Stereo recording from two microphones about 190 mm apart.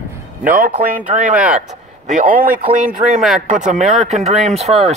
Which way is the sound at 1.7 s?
45° right (ahead or behind).